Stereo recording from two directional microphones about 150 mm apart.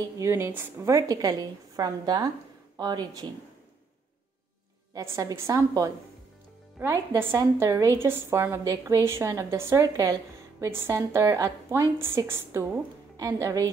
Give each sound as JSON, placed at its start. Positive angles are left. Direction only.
{"t": 0.2, "sound": "a woman's voice", "side_deg": -15}
{"t": 4.9, "sound": "a woman's voice", "side_deg": -20}
{"t": 7.2, "sound": "a woman's voice", "side_deg": -15}